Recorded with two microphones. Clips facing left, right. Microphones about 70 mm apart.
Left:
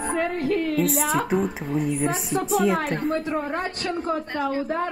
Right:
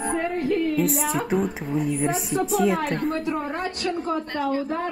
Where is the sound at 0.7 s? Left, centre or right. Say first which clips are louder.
Left 1 dB; centre.